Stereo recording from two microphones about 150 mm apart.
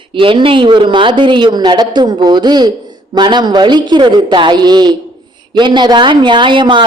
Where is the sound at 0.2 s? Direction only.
35° right (ahead or behind).